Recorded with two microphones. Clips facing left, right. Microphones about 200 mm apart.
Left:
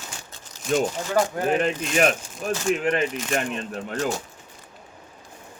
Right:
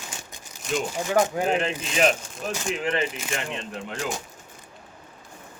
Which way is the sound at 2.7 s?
55° left (ahead or behind).